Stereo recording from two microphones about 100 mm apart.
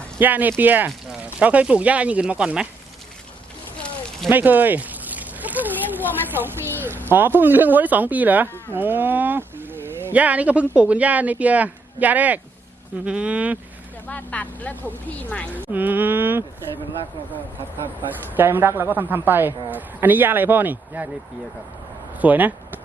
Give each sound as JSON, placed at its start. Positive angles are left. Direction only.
{"t": 0.2, "sound": "speech", "side_deg": -20}
{"t": 4.3, "sound": "a sound", "side_deg": -20}
{"t": 7.1, "sound": "speech", "side_deg": -20}
{"t": 14.1, "sound": "speech", "side_deg": 15}
{"t": 15.5, "sound": "a woman's voice", "side_deg": -20}
{"t": 18.3, "sound": "a woman's voice", "side_deg": -20}
{"t": 22.2, "sound": "speech", "side_deg": -15}